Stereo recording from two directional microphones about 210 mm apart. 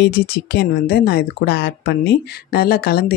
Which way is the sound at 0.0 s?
50° left (ahead or behind).